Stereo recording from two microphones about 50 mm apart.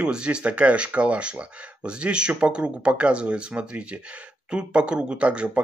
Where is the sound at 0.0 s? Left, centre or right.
Centre.